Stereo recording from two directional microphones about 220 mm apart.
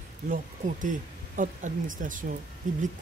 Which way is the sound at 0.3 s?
35° right (ahead or behind).